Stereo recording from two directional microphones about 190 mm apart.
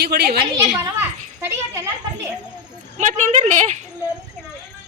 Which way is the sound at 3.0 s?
40° right (ahead or behind).